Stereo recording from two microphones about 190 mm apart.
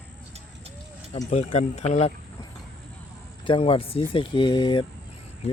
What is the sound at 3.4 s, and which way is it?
Speech, 25° left (ahead or behind).